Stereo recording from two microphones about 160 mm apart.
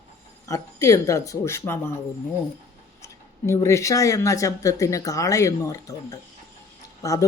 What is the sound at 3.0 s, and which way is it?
Speech, 20° left (ahead or behind).